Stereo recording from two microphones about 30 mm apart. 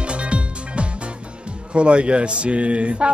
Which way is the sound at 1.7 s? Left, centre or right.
Right.